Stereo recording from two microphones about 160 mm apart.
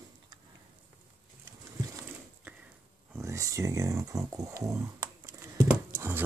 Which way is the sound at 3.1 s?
20° right (ahead or behind).